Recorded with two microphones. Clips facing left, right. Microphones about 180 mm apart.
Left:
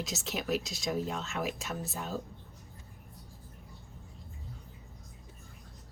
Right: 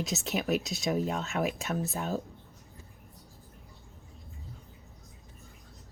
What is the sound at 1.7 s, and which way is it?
Speech, 60° right (ahead or behind).